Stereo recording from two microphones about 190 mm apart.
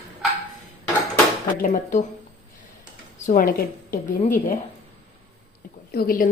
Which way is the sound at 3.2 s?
40° left (ahead or behind).